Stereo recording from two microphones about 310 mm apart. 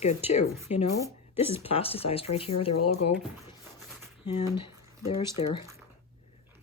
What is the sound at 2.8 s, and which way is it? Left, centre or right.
Speech, left.